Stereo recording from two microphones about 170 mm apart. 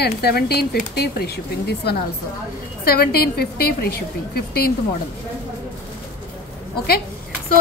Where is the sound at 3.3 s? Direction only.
65° left (ahead or behind).